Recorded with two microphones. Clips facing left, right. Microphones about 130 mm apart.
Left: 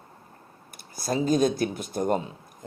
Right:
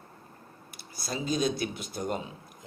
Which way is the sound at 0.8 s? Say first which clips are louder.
Left 8 dB; 45° left (ahead or behind).